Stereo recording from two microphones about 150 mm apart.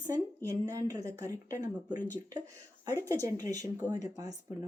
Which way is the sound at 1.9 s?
60° left (ahead or behind).